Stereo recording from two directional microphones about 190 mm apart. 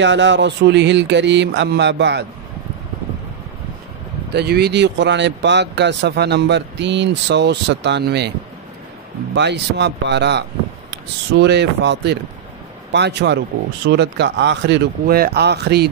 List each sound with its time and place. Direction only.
0.0 s speech: 75° right (ahead or behind)
4.3 s speech: 60° right (ahead or behind)
9.3 s speech: 65° right (ahead or behind)